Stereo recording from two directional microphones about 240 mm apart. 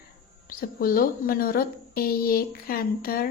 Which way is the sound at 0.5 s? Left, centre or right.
Left.